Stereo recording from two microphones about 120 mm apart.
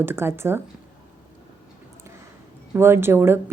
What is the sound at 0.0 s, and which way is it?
Speech, 20° right (ahead or behind).